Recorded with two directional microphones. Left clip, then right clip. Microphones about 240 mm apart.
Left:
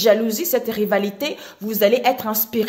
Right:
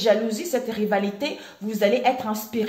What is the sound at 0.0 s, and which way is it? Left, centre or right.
A woman's voice, left.